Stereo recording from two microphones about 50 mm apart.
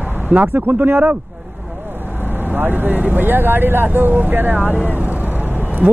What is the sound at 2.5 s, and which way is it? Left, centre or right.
Speech, right.